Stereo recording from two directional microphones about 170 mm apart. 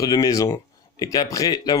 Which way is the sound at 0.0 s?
20° left (ahead or behind).